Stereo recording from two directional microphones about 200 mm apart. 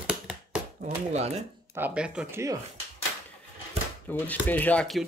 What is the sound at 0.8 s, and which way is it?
Speech, 35° right (ahead or behind).